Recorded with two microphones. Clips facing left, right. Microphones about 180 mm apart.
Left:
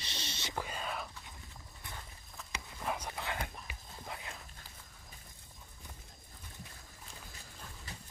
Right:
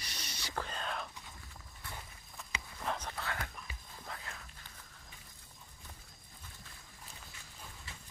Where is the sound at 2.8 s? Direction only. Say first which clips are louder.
Left 1 dB; 10° left (ahead or behind).